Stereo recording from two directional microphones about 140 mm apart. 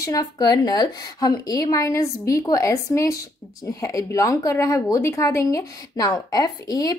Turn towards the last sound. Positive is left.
turn(degrees=25)  # may be behind; listen again after turning